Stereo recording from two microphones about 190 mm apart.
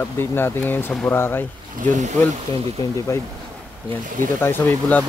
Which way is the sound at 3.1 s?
15° left (ahead or behind).